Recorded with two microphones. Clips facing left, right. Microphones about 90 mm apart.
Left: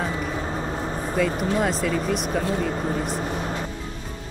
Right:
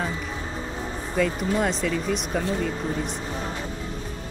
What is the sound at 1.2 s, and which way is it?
Speech, centre (ahead or behind).